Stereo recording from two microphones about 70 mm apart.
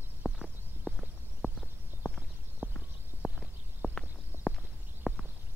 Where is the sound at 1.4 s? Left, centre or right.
Left.